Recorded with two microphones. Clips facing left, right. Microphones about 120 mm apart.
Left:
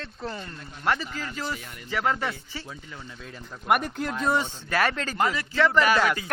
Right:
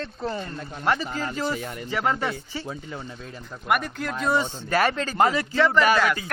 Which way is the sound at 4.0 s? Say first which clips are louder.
Even; 5° left (ahead or behind).